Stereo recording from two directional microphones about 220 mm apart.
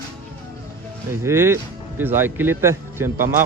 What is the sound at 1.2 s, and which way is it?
A man's voice, 10° right (ahead or behind).